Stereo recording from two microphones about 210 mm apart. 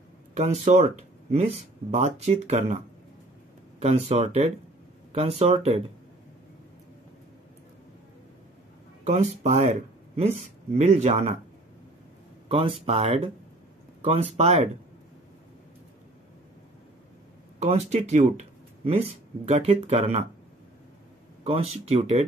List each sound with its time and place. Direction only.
0.3 s speech: 35° right (ahead or behind)
3.8 s speech: 30° right (ahead or behind)
9.0 s speech: 35° right (ahead or behind)
12.4 s speech: 25° right (ahead or behind)
17.6 s speech: 30° right (ahead or behind)
21.5 s speech: 30° right (ahead or behind)